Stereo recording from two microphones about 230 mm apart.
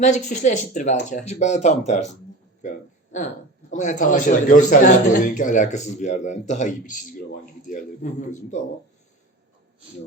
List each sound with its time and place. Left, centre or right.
0.0 s a man's voice: left
2.6 s a sound: left
3.7 s a man's voice: left